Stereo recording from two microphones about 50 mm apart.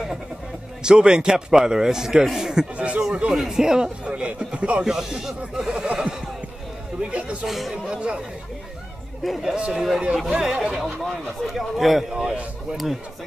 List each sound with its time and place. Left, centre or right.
0.8 s a man's voice: centre
2.8 s a sound: right
3.4 s a man's voice: centre
4.8 s a man's voice: centre
7.0 s speech: right
7.4 s speech: centre
7.7 s speech: centre
9.2 s speech: centre
9.6 s a man's voice: centre
10.8 s speech: centre